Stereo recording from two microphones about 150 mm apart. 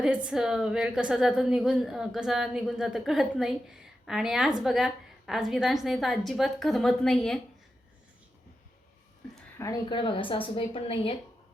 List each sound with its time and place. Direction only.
0.0 s a woman's voice: 5° right (ahead or behind)
9.6 s speech: 20° left (ahead or behind)
9.9 s a woman's voice: 35° left (ahead or behind)